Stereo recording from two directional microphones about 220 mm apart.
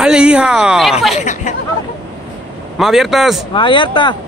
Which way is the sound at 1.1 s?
35° left (ahead or behind).